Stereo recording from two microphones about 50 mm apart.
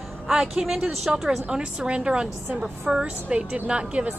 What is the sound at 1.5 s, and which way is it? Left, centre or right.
A woman's voice, centre.